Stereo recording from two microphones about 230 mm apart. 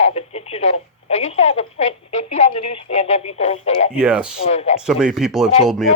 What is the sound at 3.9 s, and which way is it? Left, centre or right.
Speech, centre.